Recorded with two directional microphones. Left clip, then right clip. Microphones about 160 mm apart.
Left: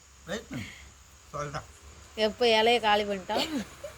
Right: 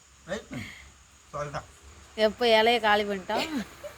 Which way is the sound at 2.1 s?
20° right (ahead or behind).